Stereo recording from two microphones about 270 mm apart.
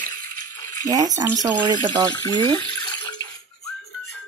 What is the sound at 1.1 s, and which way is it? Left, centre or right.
Speech, centre.